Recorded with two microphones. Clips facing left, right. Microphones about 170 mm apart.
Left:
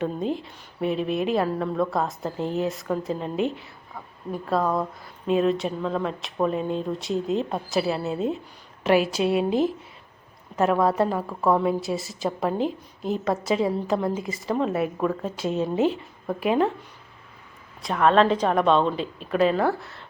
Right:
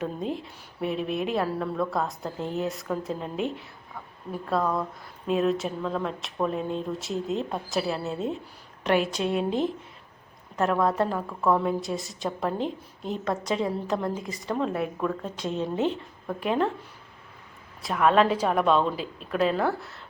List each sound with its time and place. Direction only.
0.0 s a woman's voice: centre (ahead or behind)
17.8 s a woman's voice: 5° right (ahead or behind)